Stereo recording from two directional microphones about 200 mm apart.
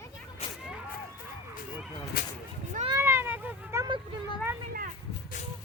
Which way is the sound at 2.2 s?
45° left (ahead or behind).